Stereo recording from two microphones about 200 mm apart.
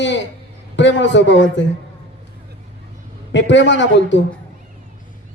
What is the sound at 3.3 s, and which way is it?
Speech, 65° left (ahead or behind).